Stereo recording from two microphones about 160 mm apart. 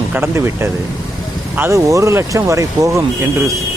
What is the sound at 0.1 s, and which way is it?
Speech, 15° right (ahead or behind).